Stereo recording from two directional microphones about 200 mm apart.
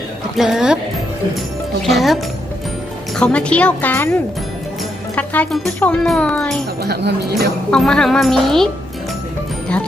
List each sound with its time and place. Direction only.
0.3 s a child's voice: 5° right (ahead or behind)
1.8 s a child's voice: centre (ahead or behind)
3.2 s a woman's voice: 5° left (ahead or behind)
5.1 s a child's voice: 5° left (ahead or behind)
6.8 s speech: 55° right (ahead or behind)
7.7 s a child's voice: 5° left (ahead or behind)